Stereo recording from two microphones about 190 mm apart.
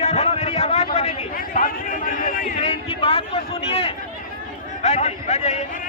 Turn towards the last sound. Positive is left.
turn(degrees=35)  # may be behind; listen again after turning